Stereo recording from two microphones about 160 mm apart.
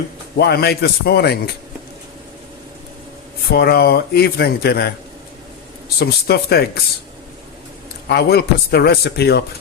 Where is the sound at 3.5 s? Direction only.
80° left.